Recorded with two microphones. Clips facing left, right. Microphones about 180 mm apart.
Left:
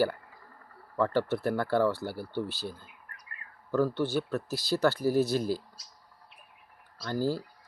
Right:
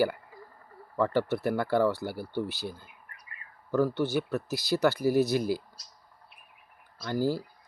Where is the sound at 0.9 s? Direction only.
15° right (ahead or behind).